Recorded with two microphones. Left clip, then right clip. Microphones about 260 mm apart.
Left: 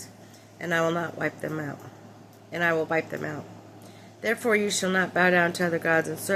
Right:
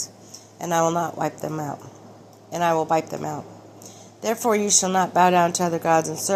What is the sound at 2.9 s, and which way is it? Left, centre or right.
Speech, right.